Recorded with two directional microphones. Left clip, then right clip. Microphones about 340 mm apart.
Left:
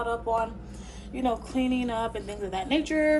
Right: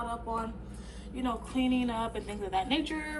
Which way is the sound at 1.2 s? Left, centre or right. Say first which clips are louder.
Left 5 dB; centre.